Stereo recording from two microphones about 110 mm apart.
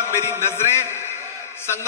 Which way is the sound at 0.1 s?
25° left (ahead or behind).